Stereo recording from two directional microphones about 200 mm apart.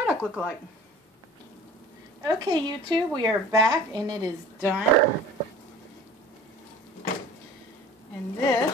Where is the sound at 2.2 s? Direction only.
20° right (ahead or behind).